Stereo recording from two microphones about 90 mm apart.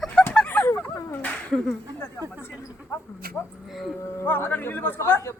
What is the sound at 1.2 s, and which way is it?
Speech, 15° left (ahead or behind).